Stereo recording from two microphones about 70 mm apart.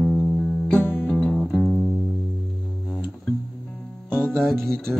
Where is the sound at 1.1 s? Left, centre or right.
Centre.